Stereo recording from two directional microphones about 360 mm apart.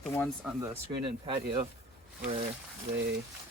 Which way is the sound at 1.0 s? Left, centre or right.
Centre.